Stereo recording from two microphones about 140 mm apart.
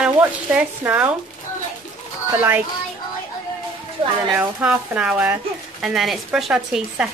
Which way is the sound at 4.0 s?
45° right (ahead or behind).